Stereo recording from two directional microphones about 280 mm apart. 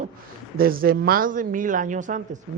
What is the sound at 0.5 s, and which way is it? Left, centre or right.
Speech, right.